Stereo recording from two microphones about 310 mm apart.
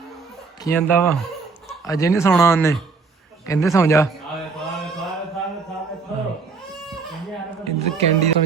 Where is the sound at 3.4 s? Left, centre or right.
Centre.